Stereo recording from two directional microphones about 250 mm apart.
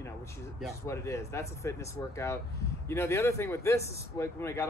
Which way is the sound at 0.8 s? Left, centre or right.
Centre.